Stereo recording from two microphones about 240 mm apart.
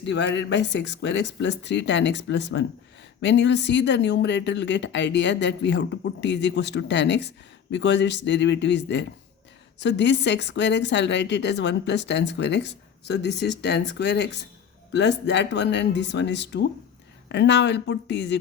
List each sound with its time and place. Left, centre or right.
0.0 s speech: left